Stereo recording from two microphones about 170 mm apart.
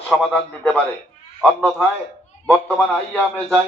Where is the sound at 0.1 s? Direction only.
5° left (ahead or behind).